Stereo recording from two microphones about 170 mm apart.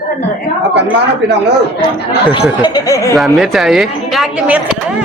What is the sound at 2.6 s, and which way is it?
Speech, 20° left (ahead or behind).